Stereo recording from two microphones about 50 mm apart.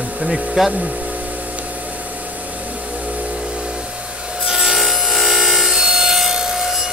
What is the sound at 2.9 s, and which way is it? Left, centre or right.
Vehicle, right.